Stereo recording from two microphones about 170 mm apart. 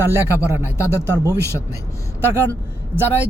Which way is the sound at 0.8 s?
15° left (ahead or behind).